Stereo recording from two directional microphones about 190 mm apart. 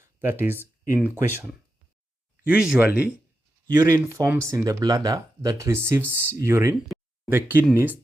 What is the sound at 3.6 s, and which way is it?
Speech, 15° right (ahead or behind).